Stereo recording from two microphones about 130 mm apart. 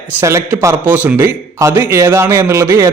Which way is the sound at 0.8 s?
10° right (ahead or behind).